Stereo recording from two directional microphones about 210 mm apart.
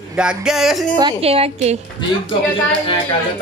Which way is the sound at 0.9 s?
25° right (ahead or behind).